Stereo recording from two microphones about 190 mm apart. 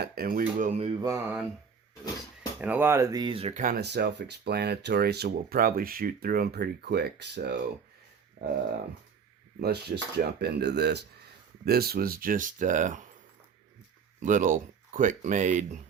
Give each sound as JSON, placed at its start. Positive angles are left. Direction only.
{"t": 0.0, "sound": "speech", "side_deg": -50}
{"t": 1.0, "sound": "speech", "side_deg": -15}
{"t": 2.6, "sound": "speech", "side_deg": -10}
{"t": 3.6, "sound": "speech", "side_deg": -55}
{"t": 9.6, "sound": "speech", "side_deg": -60}
{"t": 14.2, "sound": "speech", "side_deg": -40}